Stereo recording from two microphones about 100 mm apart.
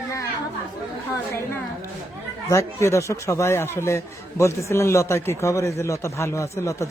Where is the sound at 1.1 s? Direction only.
25° left (ahead or behind).